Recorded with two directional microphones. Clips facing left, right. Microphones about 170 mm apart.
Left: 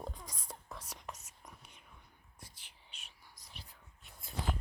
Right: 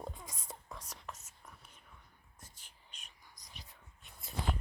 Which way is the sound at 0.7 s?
10° left (ahead or behind).